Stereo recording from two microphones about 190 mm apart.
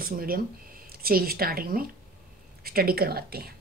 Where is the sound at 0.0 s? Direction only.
50° right (ahead or behind).